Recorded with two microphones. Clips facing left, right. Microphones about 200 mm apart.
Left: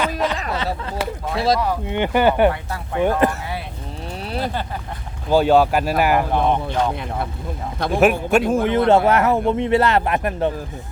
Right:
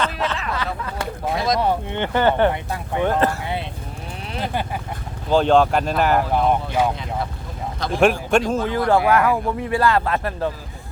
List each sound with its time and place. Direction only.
0.0 s a sound: 10° left (ahead or behind)
0.5 s a sound: 25° left (ahead or behind)
1.5 s speech: 30° right (ahead or behind)
1.9 s speech: 15° left (ahead or behind)
5.3 s speech: 10° left (ahead or behind)
6.3 s speech: 10° right (ahead or behind)
7.9 s a man's voice: 5° left (ahead or behind)
8.6 s speech: 25° left (ahead or behind)